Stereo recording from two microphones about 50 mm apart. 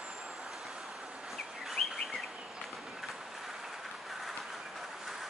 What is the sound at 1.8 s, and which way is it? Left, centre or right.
Bird, left.